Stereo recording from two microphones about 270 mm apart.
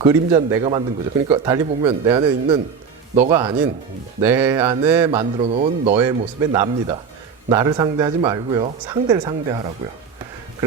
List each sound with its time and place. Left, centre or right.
0.0 s speech: centre
4.2 s speech: centre; by 6.0 s right
6.0 s speech: centre